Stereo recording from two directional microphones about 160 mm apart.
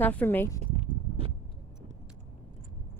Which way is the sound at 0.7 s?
35° right (ahead or behind).